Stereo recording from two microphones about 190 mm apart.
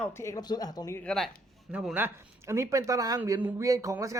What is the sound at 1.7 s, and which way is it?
Speech, 5° right (ahead or behind).